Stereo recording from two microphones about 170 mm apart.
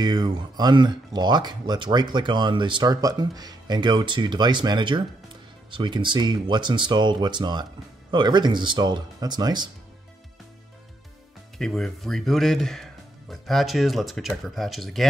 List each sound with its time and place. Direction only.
0.0 s speech: 25° right (ahead or behind)
11.5 s speech: 5° left (ahead or behind)